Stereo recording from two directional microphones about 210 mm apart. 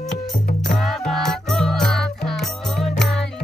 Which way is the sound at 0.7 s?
Centre (ahead or behind).